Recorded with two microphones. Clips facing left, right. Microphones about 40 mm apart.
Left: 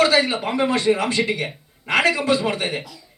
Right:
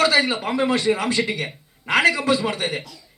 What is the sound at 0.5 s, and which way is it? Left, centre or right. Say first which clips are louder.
Speech: left 2 dB; left.